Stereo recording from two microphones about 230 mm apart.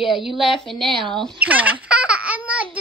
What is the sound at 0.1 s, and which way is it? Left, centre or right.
A woman's voice, centre.